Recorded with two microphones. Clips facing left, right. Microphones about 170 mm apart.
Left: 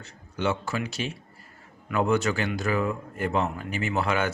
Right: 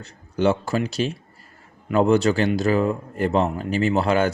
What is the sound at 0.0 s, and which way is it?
A man's voice, 35° right (ahead or behind).